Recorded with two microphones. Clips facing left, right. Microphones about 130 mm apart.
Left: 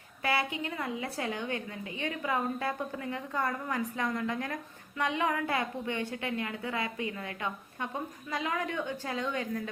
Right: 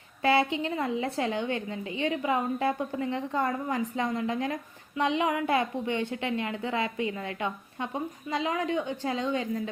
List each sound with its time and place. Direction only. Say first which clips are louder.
0.2 s a woman's voice: right 7 dB; 25° right (ahead or behind)